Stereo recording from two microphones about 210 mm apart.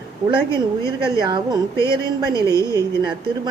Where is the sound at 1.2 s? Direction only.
20° right (ahead or behind).